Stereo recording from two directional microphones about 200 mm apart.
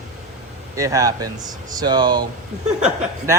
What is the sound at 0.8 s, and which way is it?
Speech, 15° right (ahead or behind).